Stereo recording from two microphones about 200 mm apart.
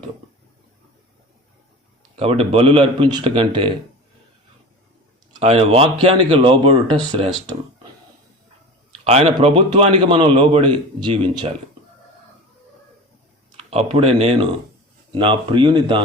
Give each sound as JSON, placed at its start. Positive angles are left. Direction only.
{"t": 2.1, "sound": "a man's voice", "side_deg": -30}
{"t": 5.4, "sound": "a man's voice", "side_deg": -30}
{"t": 9.0, "sound": "a man's voice", "side_deg": -30}
{"t": 13.6, "sound": "a man's voice", "side_deg": -30}